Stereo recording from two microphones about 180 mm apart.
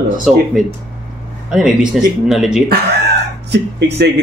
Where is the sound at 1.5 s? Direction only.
5° right (ahead or behind).